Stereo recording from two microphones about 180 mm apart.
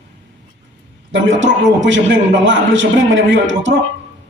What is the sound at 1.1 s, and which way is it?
A man's voice, 90° right.